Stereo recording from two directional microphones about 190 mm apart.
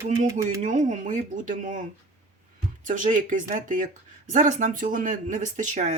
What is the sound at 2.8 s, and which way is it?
Speech, 45° right (ahead or behind).